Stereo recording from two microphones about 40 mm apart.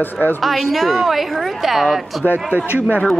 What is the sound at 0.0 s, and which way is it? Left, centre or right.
Speech, left.